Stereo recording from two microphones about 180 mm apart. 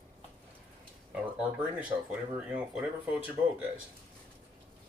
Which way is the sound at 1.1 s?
10° right (ahead or behind).